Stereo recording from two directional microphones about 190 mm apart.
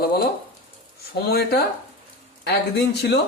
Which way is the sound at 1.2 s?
55° left (ahead or behind).